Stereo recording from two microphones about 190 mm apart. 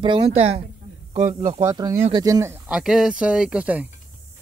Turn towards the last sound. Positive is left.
turn(degrees=-5)  # may be behind; listen again after turning